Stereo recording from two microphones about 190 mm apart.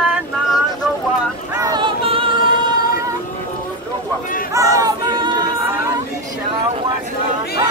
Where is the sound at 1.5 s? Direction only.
20° right (ahead or behind).